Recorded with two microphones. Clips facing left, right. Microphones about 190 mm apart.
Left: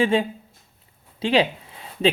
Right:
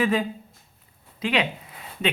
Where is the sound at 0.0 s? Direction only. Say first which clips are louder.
Left 3 dB; 25° left (ahead or behind).